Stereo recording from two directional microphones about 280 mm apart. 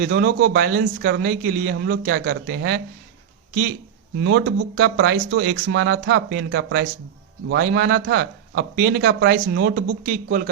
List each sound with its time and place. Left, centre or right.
0.0 s a man's voice: right
4.2 s a man's voice: right